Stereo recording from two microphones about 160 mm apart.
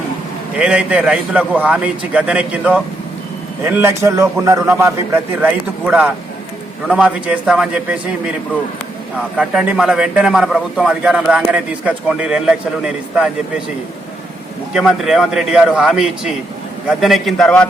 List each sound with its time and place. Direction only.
0.6 s a man's voice: 5° right (ahead or behind)
9.4 s a man's voice: 5° right (ahead or behind)
14.7 s a man's voice: 5° right (ahead or behind)